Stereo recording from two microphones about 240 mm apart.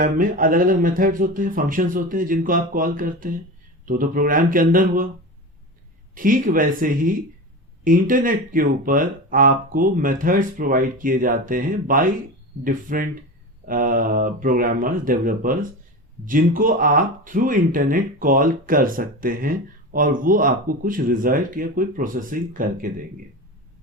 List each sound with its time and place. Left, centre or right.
0.0 s speech: right
6.1 s speech: right